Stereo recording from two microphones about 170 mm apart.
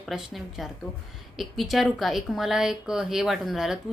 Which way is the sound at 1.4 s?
Centre (ahead or behind).